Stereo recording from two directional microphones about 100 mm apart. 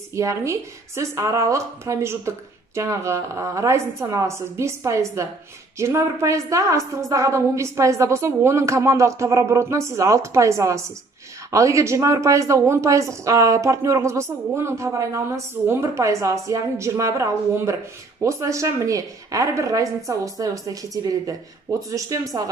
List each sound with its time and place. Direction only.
0.1 s a woman's voice: 30° right (ahead or behind)